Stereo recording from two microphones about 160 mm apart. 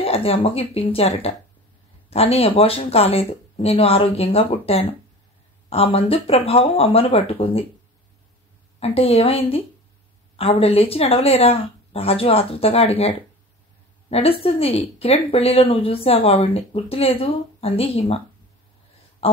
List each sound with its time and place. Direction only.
0.0 s speech: 35° left (ahead or behind)
8.7 s speech: 40° left (ahead or behind)
19.2 s speech: 35° left (ahead or behind)